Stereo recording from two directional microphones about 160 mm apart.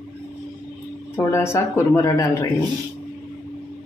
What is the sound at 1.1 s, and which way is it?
Speech, 15° left (ahead or behind).